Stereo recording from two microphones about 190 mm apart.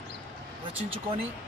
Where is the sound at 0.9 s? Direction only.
30° right (ahead or behind).